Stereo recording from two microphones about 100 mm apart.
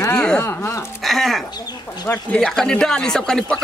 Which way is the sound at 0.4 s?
25° left (ahead or behind).